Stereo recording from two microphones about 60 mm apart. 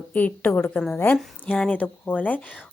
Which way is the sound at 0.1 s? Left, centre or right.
Left.